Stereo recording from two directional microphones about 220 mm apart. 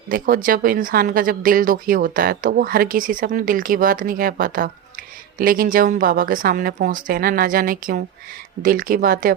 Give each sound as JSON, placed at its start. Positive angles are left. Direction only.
{"t": 0.1, "sound": "speech", "side_deg": -40}